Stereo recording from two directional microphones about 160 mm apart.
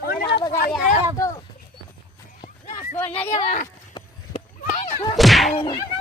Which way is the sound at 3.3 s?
45° left (ahead or behind).